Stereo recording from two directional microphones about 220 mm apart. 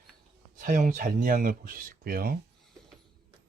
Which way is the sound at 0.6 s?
40° right (ahead or behind).